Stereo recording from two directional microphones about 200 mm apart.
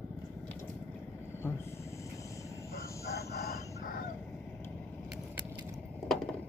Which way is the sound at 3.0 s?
50° left (ahead or behind).